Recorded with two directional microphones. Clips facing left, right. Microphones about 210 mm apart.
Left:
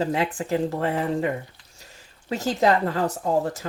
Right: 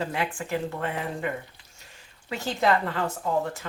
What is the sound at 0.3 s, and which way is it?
Speech, 35° left (ahead or behind).